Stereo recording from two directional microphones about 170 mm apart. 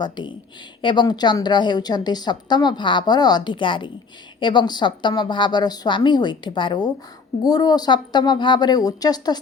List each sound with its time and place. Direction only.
0.0 s a woman's voice: 25° left (ahead or behind)